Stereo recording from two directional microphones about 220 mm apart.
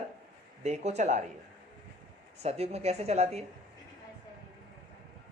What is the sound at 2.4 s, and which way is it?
A woman's voice, 30° right (ahead or behind).